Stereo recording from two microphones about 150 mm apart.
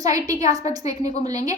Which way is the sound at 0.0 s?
20° right (ahead or behind).